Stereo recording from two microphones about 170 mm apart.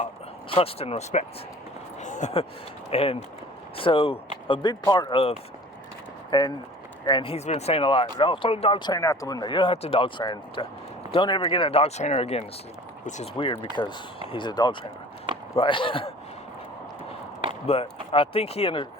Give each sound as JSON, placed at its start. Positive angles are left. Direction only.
{"t": 0.5, "sound": "speech", "side_deg": 35}
{"t": 8.9, "sound": "speech", "side_deg": 20}
{"t": 17.7, "sound": "speech", "side_deg": 35}